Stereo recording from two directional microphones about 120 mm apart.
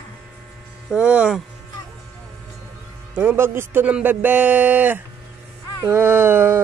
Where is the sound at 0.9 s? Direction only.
10° right (ahead or behind).